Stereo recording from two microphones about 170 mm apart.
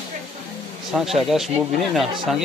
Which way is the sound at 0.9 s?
Centre (ahead or behind).